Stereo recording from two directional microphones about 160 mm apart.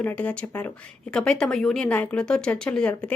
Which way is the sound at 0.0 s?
10° left (ahead or behind).